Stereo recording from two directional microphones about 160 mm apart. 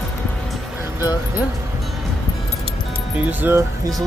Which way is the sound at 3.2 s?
15° right (ahead or behind).